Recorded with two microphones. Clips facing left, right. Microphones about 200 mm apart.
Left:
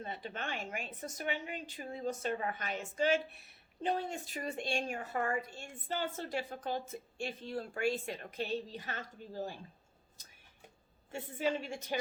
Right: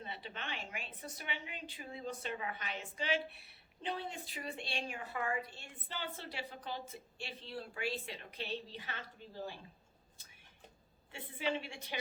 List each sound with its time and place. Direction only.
0.0 s a woman's voice: 45° left (ahead or behind)
11.1 s a woman's voice: 45° left (ahead or behind)